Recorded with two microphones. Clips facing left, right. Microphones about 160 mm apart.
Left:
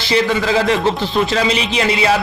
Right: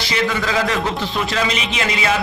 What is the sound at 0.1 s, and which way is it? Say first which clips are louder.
Speech: left 6 dB; 30° left (ahead or behind).